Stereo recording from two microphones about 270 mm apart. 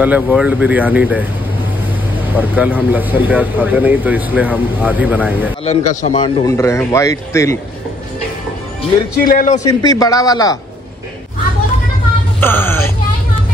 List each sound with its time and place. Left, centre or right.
0.0 s speech: centre
2.3 s speech: centre
5.7 s speech: left
9.1 s a man's voice: left
9.6 s speech: centre
12.4 s speech: centre